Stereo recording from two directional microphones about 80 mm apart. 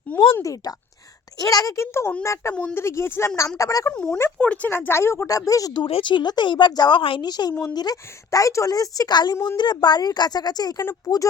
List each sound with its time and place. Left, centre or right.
0.1 s a sound: left
1.4 s a woman's voice: left
3.6 s a woman's voice: left
3.9 s speech: centre
4.7 s a woman's voice: left
5.7 s a woman's voice: left
11.0 s a woman's voice: left